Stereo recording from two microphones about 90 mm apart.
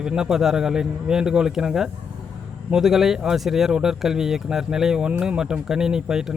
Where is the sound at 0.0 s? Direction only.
5° right (ahead or behind).